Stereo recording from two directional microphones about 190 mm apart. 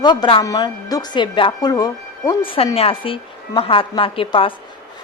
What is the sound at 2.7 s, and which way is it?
A woman's voice, 30° left (ahead or behind).